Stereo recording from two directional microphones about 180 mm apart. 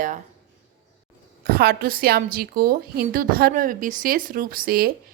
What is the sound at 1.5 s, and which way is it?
A woman's voice, 60° right (ahead or behind).